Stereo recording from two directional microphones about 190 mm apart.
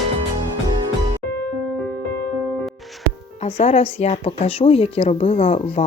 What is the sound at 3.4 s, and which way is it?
A woman's voice, 35° left (ahead or behind).